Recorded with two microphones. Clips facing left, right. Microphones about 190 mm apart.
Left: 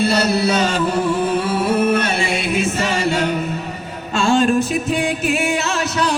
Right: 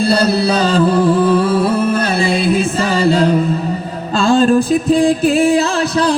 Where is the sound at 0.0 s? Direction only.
30° right (ahead or behind).